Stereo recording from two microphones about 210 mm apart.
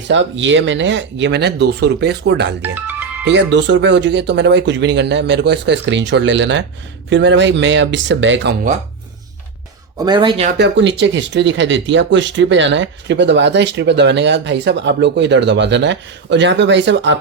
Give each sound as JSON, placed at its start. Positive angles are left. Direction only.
{"t": 0.1, "sound": "speech", "side_deg": -60}
{"t": 2.6, "sound": "music", "side_deg": -10}
{"t": 3.2, "sound": "speech", "side_deg": -60}
{"t": 10.0, "sound": "a man's voice", "side_deg": -20}
{"t": 10.6, "sound": "speech", "side_deg": -60}